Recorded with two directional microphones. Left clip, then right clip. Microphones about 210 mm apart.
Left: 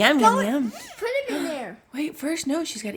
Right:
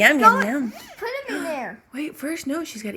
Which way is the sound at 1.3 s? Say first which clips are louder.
Right 1 dB; 20° left (ahead or behind).